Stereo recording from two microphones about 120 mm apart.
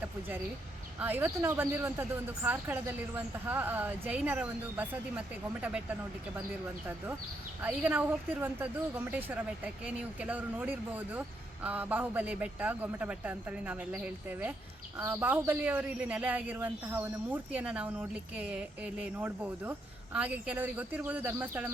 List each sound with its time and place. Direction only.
0.9 s a woman's voice: 15° right (ahead or behind)
7.6 s a woman's voice: 15° right (ahead or behind)